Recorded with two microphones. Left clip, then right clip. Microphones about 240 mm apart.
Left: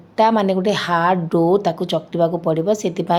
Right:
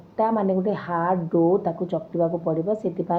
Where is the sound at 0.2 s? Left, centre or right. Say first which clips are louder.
Left 6 dB; left.